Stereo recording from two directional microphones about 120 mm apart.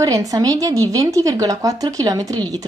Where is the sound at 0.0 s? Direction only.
30° right (ahead or behind).